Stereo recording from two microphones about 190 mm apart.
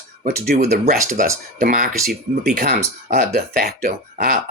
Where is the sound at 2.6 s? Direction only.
55° right (ahead or behind).